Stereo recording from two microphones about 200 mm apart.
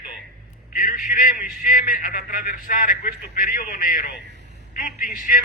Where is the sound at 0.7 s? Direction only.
45° left (ahead or behind).